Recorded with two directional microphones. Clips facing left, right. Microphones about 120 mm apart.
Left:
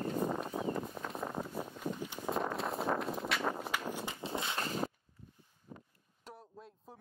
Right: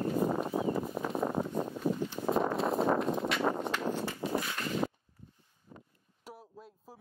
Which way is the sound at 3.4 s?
40° right (ahead or behind).